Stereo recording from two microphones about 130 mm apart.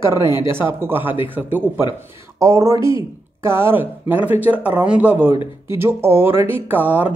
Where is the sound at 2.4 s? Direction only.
20° right (ahead or behind).